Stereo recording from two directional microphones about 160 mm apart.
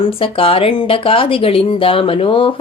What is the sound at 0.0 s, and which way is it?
Speech, 35° left (ahead or behind).